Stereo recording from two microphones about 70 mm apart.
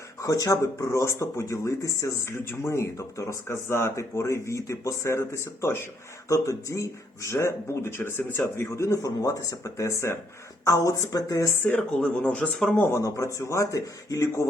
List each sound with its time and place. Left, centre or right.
0.2 s speech: left
11.5 s speech: left
12.9 s speech: left